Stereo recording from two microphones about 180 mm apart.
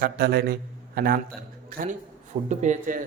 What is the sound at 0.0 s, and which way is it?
A man's voice, 60° right (ahead or behind).